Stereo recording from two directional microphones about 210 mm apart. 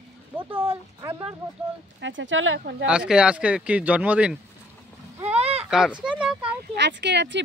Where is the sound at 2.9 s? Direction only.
5° right (ahead or behind).